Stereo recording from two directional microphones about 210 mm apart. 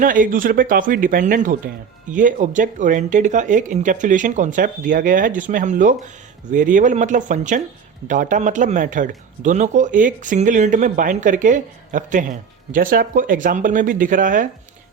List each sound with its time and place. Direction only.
0.0 s speech: 40° right (ahead or behind)